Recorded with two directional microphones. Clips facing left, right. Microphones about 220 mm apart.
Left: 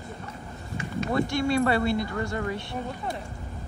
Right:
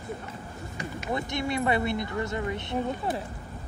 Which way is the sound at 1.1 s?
20° right (ahead or behind).